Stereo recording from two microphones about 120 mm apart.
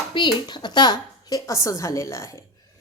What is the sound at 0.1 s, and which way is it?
Speech, 40° left (ahead or behind).